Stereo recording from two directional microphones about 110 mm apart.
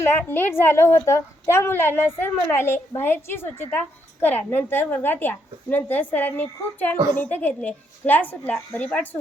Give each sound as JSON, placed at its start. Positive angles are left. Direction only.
{"t": 0.0, "sound": "a woman's voice", "side_deg": 20}